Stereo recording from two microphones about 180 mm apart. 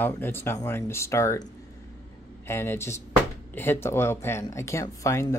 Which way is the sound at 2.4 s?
15° left (ahead or behind).